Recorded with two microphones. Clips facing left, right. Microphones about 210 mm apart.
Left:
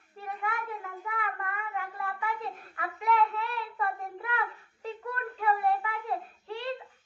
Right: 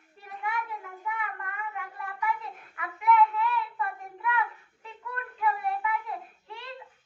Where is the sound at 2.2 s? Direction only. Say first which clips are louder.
Right 2 dB; 35° left (ahead or behind).